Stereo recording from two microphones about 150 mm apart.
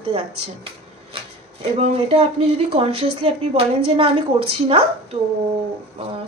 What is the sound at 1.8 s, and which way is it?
Speech, 40° right (ahead or behind).